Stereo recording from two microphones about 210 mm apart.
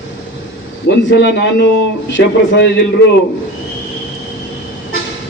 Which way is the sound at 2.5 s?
55° left (ahead or behind).